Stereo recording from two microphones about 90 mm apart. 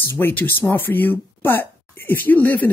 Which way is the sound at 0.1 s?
20° left (ahead or behind).